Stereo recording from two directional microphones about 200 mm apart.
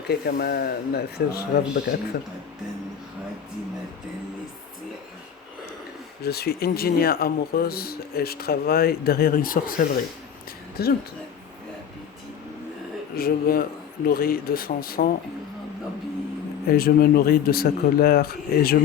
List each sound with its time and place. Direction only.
0.1 s speech: 50° left (ahead or behind)
6.2 s speech: 50° left (ahead or behind)
13.1 s speech: 50° left (ahead or behind)
16.6 s speech: 50° left (ahead or behind)